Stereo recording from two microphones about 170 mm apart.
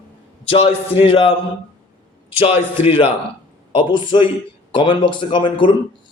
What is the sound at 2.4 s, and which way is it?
A man's voice, 35° left (ahead or behind).